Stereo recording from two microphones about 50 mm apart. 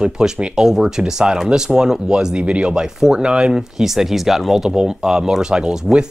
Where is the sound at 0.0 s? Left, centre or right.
Centre.